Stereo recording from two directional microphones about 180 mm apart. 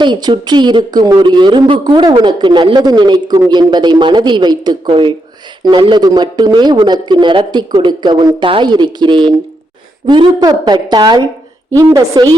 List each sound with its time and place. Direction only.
0.0 s a woman's voice: 25° right (ahead or behind)